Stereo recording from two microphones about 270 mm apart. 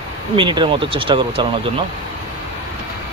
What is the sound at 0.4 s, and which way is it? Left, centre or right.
Speech, centre.